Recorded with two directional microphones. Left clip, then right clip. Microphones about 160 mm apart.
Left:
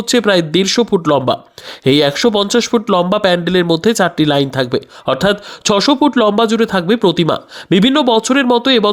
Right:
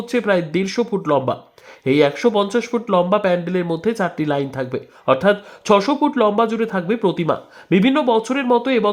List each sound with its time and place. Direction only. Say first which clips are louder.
0.1 s speech: left 6 dB; 35° left (ahead or behind)